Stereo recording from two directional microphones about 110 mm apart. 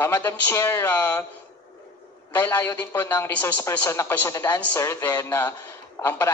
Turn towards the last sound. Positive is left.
turn(degrees=20)  # may be behind; listen again after turning